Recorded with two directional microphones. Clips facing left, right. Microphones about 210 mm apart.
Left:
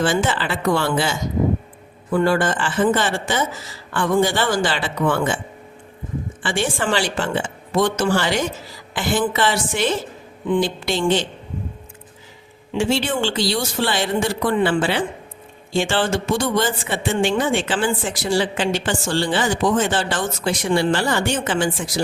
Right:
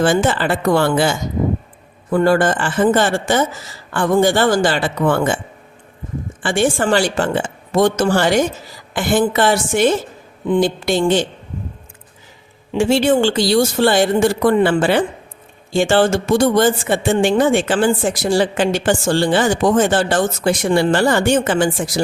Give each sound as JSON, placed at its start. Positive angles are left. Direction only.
{"t": 0.0, "sound": "speech", "side_deg": -45}
{"t": 2.1, "sound": "speech", "side_deg": -45}
{"t": 6.4, "sound": "speech", "side_deg": -50}
{"t": 12.7, "sound": "speech", "side_deg": -45}